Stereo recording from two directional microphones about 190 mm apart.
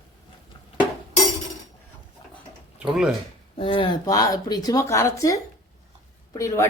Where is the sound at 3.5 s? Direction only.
30° left (ahead or behind).